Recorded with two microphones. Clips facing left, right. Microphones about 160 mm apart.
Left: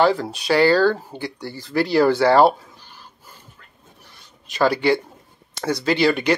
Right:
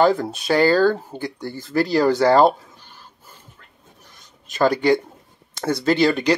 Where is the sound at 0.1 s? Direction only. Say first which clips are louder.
Even; 50° right (ahead or behind).